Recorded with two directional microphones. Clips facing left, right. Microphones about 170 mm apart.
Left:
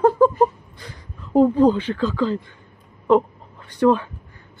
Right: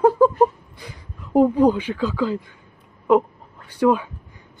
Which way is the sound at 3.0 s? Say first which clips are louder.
Even; 10° right (ahead or behind).